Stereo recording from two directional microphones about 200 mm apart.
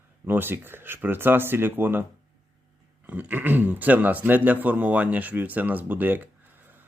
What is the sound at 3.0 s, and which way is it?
A man's voice, 10° right (ahead or behind).